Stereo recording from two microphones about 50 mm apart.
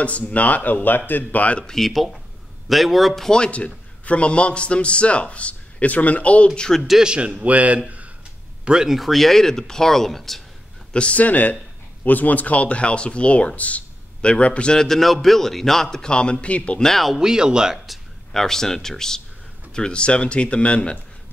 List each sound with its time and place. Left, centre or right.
0.0 s a man's voice: left
1.6 s speech: centre
3.3 s a man's voice: centre
7.0 s a man's voice: centre
8.6 s speech: centre
8.9 s speech: centre
10.9 s a man's voice: left
14.9 s a man's voice: centre; by 16.8 s left
16.8 s speech: centre
17.2 s speech: centre
17.8 s a man's voice: centre; by 21.0 s left